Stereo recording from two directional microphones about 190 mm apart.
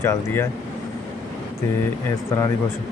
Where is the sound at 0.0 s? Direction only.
10° left (ahead or behind).